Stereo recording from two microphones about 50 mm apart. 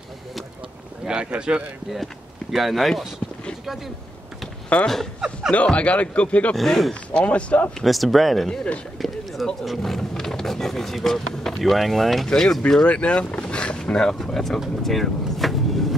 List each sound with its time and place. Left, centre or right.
1.0 s speech: centre
2.5 s speech: centre
4.7 s speech: left
6.5 s speech: centre
6.9 s speech: left
7.8 s speech: centre
8.9 s run: centre
9.6 s speech: centre
12.8 s speech: left; by 14.6 s centre
14.8 s vehicle: centre